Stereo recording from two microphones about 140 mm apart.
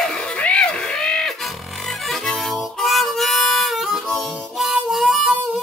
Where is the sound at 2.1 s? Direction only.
Centre (ahead or behind).